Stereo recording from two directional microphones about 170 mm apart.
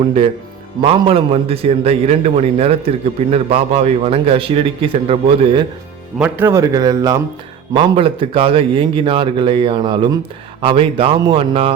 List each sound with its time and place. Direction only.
0.8 s a man's voice: 35° right (ahead or behind)
6.1 s a man's voice: 10° right (ahead or behind); by 11.7 s 30° right (ahead or behind)